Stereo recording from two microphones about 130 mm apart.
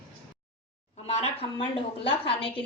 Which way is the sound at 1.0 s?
55° left (ahead or behind).